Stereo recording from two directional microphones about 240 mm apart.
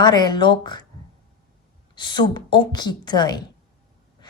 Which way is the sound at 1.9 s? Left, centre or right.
Centre.